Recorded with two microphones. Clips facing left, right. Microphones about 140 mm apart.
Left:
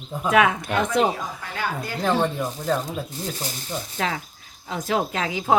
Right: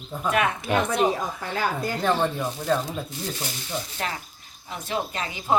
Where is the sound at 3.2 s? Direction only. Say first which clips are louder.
Left 1 dB; 40° left (ahead or behind).